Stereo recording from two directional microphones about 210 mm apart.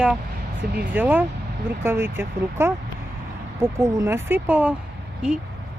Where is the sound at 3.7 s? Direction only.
10° right (ahead or behind).